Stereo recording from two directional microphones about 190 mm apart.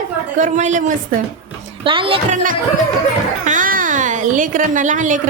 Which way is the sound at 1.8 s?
25° right (ahead or behind).